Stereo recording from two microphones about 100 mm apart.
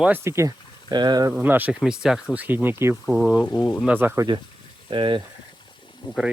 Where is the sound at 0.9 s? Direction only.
45° right (ahead or behind).